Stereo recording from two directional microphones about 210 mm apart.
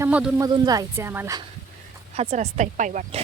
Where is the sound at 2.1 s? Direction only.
30° right (ahead or behind).